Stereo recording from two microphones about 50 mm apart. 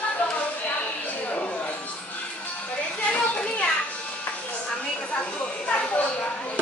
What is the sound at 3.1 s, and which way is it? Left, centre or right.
Children playing, left.